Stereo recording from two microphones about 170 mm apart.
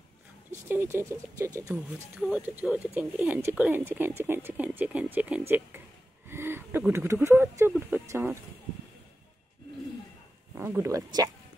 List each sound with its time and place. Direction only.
0.7 s speech: 15° right (ahead or behind)
1.7 s speech: 5° right (ahead or behind)
6.2 s a sound: 15° right (ahead or behind)
6.9 s speech: 15° right (ahead or behind)
10.5 s speech: 15° right (ahead or behind)